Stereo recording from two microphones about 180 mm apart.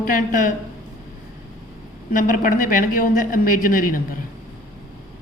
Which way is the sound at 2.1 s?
50° left (ahead or behind).